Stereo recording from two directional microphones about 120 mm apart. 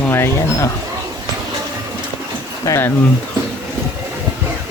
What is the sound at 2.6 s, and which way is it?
Speech, 20° left (ahead or behind).